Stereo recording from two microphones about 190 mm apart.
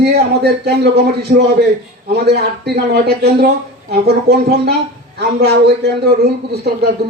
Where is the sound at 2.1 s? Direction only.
60° right (ahead or behind).